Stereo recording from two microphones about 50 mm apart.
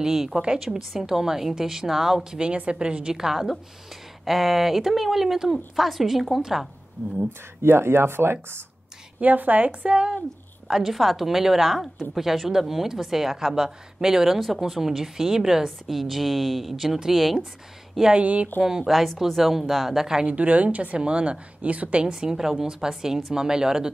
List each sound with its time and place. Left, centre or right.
0.0 s a woman's voice: centre
7.2 s speech: right
9.2 s a woman's voice: right
10.7 s a woman's voice: centre
18.1 s a woman's voice: right
18.6 s a woman's voice: centre
20.2 s a woman's voice: right
22.0 s a woman's voice: centre